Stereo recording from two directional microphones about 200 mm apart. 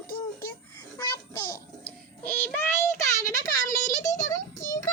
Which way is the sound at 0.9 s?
15° left (ahead or behind).